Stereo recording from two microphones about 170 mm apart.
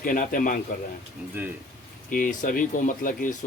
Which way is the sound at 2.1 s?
55° left (ahead or behind).